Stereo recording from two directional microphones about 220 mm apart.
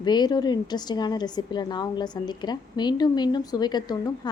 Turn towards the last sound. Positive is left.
turn(degrees=20)  # may be behind; listen again after turning